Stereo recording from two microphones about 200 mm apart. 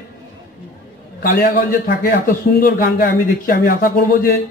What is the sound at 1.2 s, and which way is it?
A man's voice, 45° left (ahead or behind).